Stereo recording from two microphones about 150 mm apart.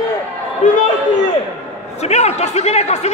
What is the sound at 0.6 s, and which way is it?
Speech, 55° left (ahead or behind).